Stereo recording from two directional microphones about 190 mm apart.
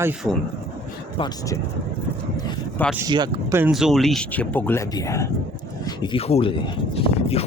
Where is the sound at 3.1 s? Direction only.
20° right (ahead or behind).